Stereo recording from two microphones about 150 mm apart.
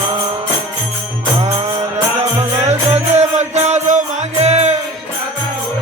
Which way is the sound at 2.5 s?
45° right (ahead or behind).